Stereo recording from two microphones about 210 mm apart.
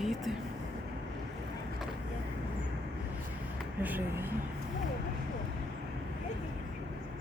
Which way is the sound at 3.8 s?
10° right (ahead or behind).